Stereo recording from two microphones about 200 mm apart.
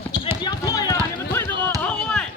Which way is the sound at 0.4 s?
20° left (ahead or behind).